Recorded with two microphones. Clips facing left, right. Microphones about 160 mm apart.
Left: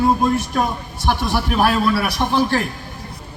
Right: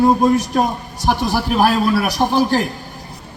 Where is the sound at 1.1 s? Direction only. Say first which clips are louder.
Right 2 dB; 35° right (ahead or behind).